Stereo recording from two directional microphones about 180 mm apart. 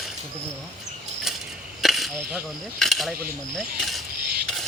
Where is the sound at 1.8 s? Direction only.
Centre (ahead or behind).